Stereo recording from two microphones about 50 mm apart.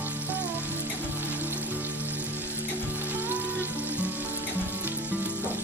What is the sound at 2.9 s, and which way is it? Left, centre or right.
Music, right.